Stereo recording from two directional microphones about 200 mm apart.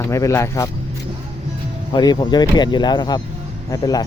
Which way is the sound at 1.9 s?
20° left (ahead or behind).